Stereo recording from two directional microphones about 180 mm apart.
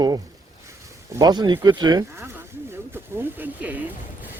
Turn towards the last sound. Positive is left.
turn(degrees=-10)  # may be behind; listen again after turning